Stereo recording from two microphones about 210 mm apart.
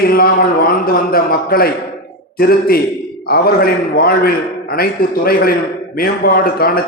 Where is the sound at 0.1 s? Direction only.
45° left (ahead or behind).